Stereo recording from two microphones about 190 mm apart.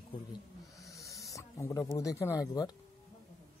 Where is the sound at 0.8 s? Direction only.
15° left (ahead or behind).